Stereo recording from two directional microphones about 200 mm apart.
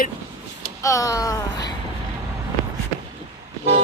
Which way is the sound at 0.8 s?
15° left (ahead or behind).